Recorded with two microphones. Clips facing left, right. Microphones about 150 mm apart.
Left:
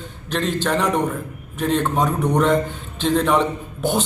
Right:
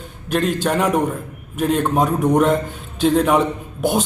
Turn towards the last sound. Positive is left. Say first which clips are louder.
# right 2 dB
turn(degrees=-10)  # may be behind; listen again after turning